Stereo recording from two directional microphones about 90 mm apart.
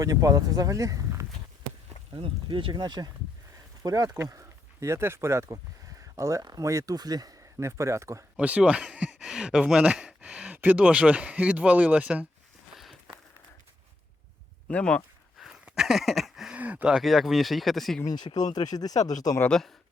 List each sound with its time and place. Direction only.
0.0 s speech: 40° right (ahead or behind)
2.1 s speech: 70° right (ahead or behind)
3.8 s speech: 45° right (ahead or behind)
7.6 s speech: 30° right (ahead or behind)
8.4 s a sound: 15° right (ahead or behind)
10.6 s speech: 15° right (ahead or behind)
12.7 s a sound: centre (ahead or behind)
14.7 s speech: 10° left (ahead or behind)
15.4 s a sound: 5° right (ahead or behind)
16.6 s a sound: 15° right (ahead or behind)
17.0 s speech: centre (ahead or behind)
18.0 s speech: 50° left (ahead or behind)
19.5 s speech: 5° left (ahead or behind)